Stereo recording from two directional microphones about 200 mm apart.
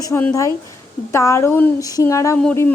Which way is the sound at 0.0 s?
10° left (ahead or behind).